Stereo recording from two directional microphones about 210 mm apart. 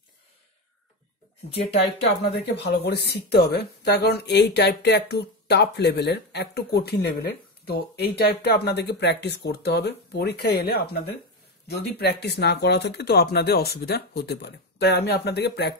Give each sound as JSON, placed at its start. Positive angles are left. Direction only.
{"t": 1.8, "sound": "speech", "side_deg": 50}